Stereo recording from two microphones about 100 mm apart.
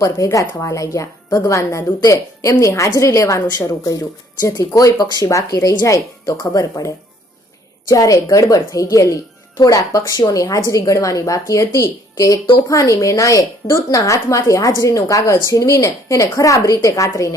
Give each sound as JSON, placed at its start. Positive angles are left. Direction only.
{"t": 0.0, "sound": "speech", "side_deg": 35}